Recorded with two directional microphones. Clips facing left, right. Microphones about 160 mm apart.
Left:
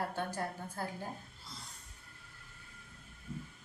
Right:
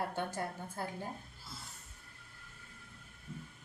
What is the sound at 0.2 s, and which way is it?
Speech, 25° right (ahead or behind).